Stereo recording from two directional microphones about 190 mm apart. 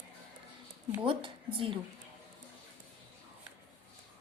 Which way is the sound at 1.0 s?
25° right (ahead or behind).